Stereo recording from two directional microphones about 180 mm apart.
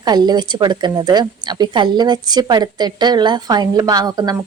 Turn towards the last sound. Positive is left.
turn(degrees=-20)  # may be behind; listen again after turning